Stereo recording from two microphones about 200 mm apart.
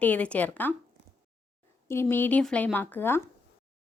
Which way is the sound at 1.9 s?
10° left (ahead or behind).